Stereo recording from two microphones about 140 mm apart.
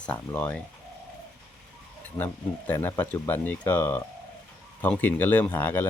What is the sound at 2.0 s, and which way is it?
Speech, 10° left (ahead or behind).